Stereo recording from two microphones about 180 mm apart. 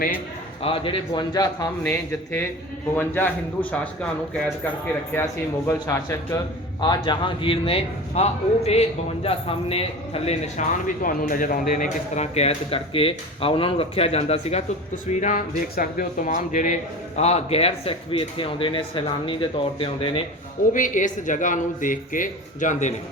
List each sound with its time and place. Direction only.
0.6 s a man's voice: 30° left (ahead or behind); by 3.8 s 10° left (ahead or behind)
5.6 s a man's voice: 15° left (ahead or behind); by 9.8 s 30° left (ahead or behind)
10.2 s a man's voice: 45° left (ahead or behind)
20.7 s speech: 45° left (ahead or behind)